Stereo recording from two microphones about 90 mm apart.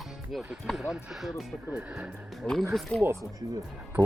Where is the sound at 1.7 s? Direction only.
15° right (ahead or behind).